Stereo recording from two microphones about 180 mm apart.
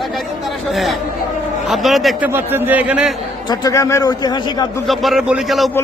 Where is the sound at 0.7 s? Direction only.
Centre (ahead or behind).